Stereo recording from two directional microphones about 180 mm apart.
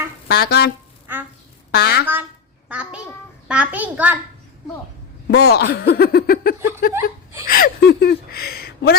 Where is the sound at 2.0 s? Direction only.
10° right (ahead or behind).